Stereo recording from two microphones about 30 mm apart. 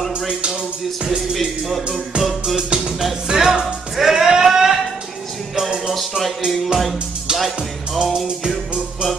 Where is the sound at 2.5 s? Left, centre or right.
Right.